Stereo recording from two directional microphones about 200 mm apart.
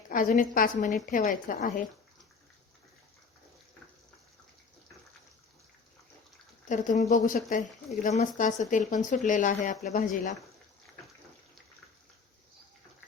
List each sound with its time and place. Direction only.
0.1 s speech: 40° left (ahead or behind)
6.7 s speech: 40° left (ahead or behind)